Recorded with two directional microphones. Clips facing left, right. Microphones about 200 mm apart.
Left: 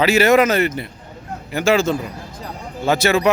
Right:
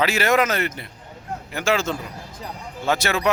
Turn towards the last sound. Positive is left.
turn(degrees=5)  # may be behind; listen again after turning